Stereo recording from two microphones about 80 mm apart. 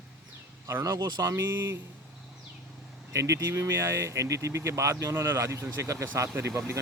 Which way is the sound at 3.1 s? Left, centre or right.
Right.